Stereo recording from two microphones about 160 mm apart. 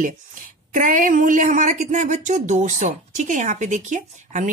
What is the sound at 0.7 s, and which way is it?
Speech, 55° right (ahead or behind).